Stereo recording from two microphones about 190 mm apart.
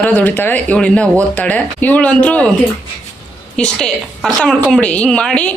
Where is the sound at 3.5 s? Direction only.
5° left (ahead or behind).